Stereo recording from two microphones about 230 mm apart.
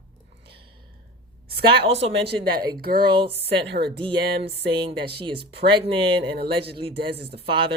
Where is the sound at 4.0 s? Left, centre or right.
Right.